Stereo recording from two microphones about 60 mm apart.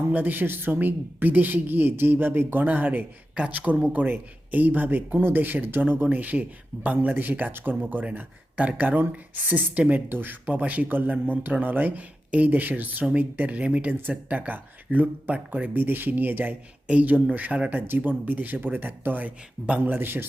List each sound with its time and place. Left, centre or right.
0.1 s a woman's voice: right
3.3 s speech: centre
3.9 s a woman's voice: right
13.9 s a woman's voice: right